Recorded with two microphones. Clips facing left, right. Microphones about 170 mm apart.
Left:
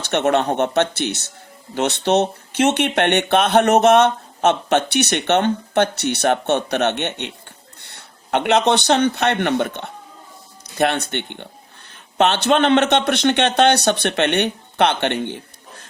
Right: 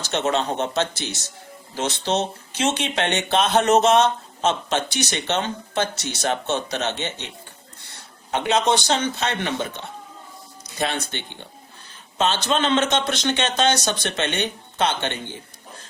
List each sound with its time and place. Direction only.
0.0 s speech: 60° left (ahead or behind)